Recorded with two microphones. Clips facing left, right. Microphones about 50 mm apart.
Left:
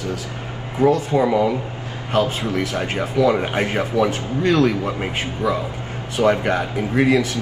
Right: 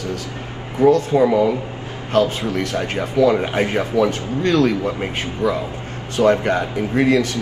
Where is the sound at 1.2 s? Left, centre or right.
Centre.